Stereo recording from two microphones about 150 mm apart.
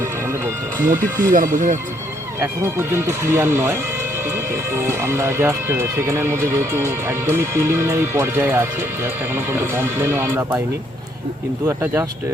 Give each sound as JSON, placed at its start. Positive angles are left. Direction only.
{"t": 0.9, "sound": "speech", "side_deg": -60}
{"t": 2.4, "sound": "speech", "side_deg": -15}
{"t": 11.6, "sound": "speech", "side_deg": -15}